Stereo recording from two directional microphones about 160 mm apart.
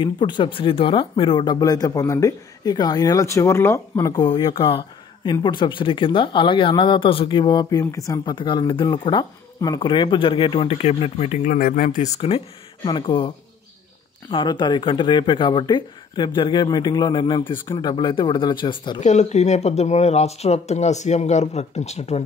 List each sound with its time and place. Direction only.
0.0 s speech: 30° left (ahead or behind); by 12.1 s 60° left (ahead or behind)
12.2 s speech: 35° left (ahead or behind)
14.3 s speech: 30° left (ahead or behind)
18.9 s speech: 45° left (ahead or behind)